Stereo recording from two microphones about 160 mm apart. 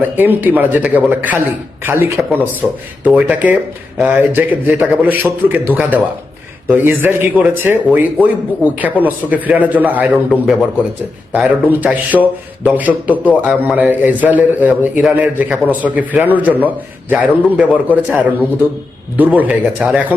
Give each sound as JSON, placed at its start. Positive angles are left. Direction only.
{"t": 0.2, "sound": "a man's voice", "side_deg": -10}